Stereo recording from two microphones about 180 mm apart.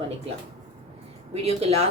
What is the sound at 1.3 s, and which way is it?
Speech, 35° right (ahead or behind).